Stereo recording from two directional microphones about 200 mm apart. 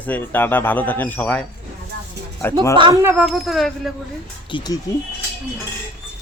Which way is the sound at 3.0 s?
10° right (ahead or behind).